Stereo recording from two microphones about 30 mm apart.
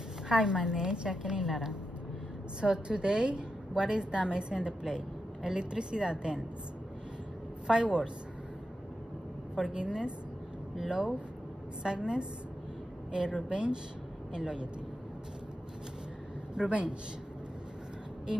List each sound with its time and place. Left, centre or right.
0.3 s a woman's voice: right
1.4 s a woman's voice: centre
2.6 s a woman's voice: right
4.4 s a woman's voice: right
7.6 s a woman's voice: right
9.6 s a woman's voice: right
10.9 s a woman's voice: right
16.5 s a woman's voice: right